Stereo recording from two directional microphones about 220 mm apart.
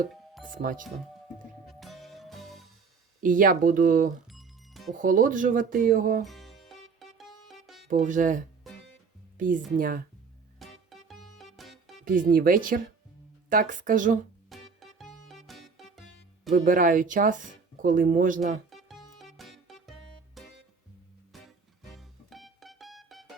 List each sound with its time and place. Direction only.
0.5 s speech: 40° right (ahead or behind)
1.6 s music: centre (ahead or behind)
3.2 s speech: 40° right (ahead or behind)
4.3 s music: centre (ahead or behind)
4.9 s speech: 35° right (ahead or behind)
6.2 s music: centre (ahead or behind)
7.9 s speech: 35° right (ahead or behind)
10.6 s music: centre (ahead or behind)
12.0 s speech: 40° right (ahead or behind)
14.5 s music: centre (ahead or behind)
16.6 s speech: 35° right (ahead or behind)
18.7 s music: centre (ahead or behind)